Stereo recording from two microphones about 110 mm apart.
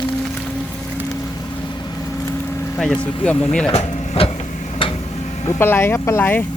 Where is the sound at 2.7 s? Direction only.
10° left (ahead or behind).